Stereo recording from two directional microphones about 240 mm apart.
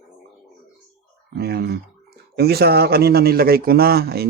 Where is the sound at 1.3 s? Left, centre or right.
Right.